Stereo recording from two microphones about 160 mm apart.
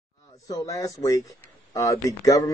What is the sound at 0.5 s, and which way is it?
Speech, 20° left (ahead or behind).